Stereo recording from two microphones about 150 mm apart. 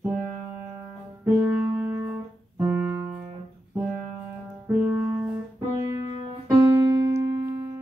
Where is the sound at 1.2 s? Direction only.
15° right (ahead or behind).